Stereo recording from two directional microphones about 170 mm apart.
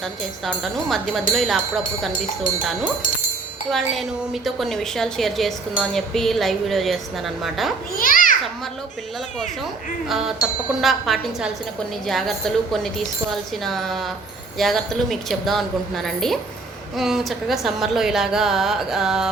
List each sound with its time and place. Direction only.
0.0 s a woman's voice: centre (ahead or behind)
3.7 s a woman's voice: centre (ahead or behind)
7.9 s children playing: 55° left (ahead or behind)
10.1 s a woman's voice: centre (ahead or behind)